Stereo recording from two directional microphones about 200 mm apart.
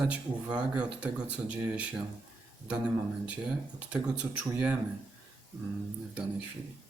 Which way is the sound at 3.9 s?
5° right (ahead or behind).